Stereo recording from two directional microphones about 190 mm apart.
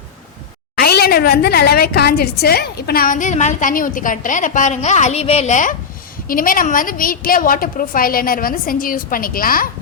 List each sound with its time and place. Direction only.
0.8 s a woman's voice: 55° left (ahead or behind)